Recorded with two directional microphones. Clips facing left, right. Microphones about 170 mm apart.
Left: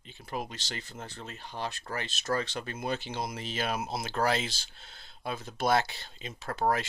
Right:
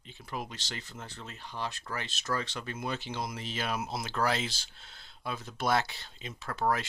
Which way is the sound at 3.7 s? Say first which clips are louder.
Left 1 dB; 30° left (ahead or behind).